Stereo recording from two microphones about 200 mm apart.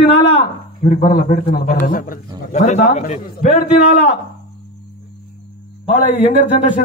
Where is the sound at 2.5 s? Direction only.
35° left (ahead or behind).